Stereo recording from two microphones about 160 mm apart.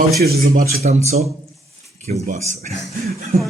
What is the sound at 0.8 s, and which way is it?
Speech, 45° right (ahead or behind).